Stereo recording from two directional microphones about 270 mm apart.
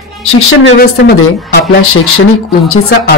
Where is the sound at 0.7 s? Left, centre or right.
Left.